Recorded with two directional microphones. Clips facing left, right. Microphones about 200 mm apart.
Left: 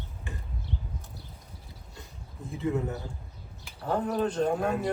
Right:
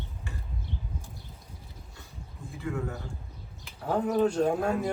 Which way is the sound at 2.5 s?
20° left (ahead or behind).